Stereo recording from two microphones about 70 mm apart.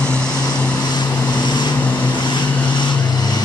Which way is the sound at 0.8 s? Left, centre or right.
Left.